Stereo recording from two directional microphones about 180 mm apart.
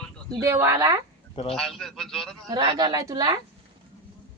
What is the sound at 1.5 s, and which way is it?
Speech, centre (ahead or behind).